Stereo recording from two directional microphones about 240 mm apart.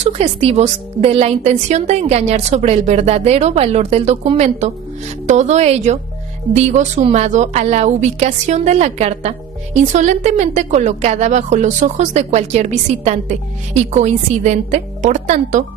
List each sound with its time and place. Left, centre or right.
0.0 s a woman's voice: right